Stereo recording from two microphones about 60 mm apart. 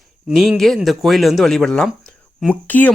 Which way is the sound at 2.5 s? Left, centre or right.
Left.